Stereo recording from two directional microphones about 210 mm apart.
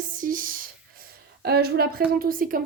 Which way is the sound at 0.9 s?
50° right (ahead or behind).